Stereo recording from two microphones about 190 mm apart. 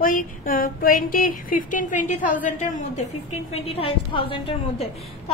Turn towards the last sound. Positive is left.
turn(degrees=30)  # may be behind; listen again after turning